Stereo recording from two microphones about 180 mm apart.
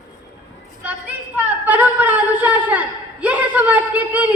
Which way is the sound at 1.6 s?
10° right (ahead or behind).